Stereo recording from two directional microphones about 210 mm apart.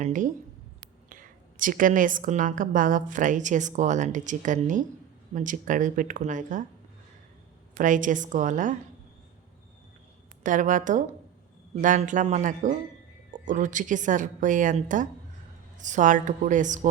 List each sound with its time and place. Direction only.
0.0 s a woman's voice: 40° right (ahead or behind)
7.8 s a woman's voice: 40° right (ahead or behind)
10.4 s a woman's voice: 40° right (ahead or behind)